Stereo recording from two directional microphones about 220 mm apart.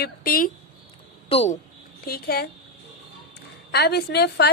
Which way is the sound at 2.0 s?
45° left (ahead or behind).